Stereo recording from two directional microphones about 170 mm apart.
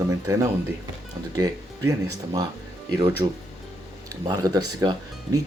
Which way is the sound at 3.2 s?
25° right (ahead or behind).